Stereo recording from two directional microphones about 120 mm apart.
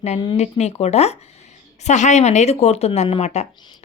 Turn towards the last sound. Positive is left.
turn(degrees=65)  # may be behind; listen again after turning